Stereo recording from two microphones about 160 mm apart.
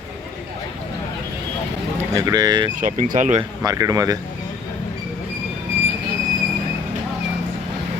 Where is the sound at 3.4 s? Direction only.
20° right (ahead or behind).